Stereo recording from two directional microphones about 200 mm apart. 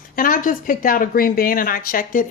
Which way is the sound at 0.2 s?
45° left (ahead or behind).